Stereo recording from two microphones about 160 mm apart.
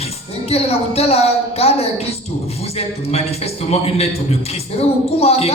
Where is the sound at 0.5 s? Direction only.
40° left (ahead or behind).